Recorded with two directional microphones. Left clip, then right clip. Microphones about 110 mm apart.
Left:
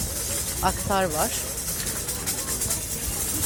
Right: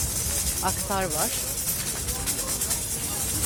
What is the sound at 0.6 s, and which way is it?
Speech, 5° left (ahead or behind).